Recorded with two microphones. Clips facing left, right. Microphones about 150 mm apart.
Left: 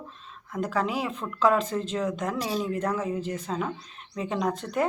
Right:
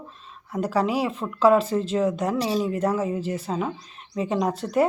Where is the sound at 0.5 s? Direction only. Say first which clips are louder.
Right 4 dB; 10° right (ahead or behind).